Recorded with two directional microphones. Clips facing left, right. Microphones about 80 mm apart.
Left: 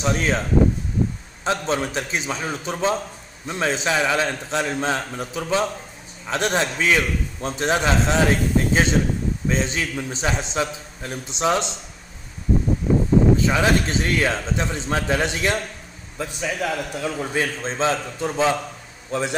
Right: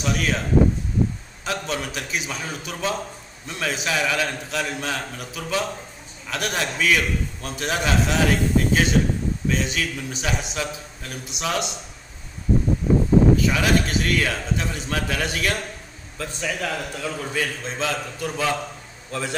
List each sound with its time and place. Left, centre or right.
0.0 s a man's voice: left
1.4 s a man's voice: left
13.4 s a man's voice: left
17.4 s a man's voice: left